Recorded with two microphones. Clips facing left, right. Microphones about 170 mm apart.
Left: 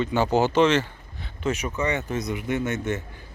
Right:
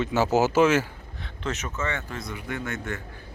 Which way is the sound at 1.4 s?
10° left (ahead or behind).